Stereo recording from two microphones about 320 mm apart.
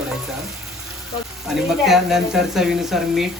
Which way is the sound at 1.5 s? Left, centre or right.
Centre.